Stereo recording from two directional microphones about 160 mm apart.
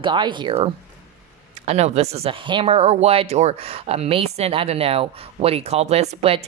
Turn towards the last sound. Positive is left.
turn(degrees=-40)  # may be behind; listen again after turning